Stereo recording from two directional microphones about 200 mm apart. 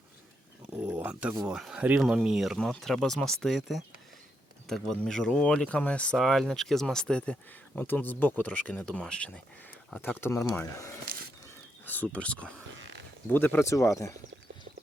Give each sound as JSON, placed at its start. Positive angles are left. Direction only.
{"t": 0.7, "sound": "a sound", "side_deg": -10}
{"t": 1.5, "sound": "speech", "side_deg": -5}
{"t": 11.0, "sound": "wild animals", "side_deg": -45}
{"t": 12.0, "sound": "speech", "side_deg": 5}